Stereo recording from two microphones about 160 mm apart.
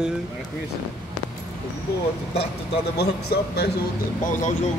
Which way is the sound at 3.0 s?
90° left.